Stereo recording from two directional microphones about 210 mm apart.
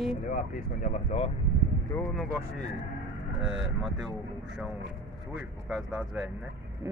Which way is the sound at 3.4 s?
Centre (ahead or behind).